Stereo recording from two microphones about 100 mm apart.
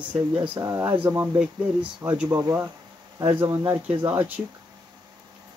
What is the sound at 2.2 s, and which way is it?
Speech, 35° right (ahead or behind).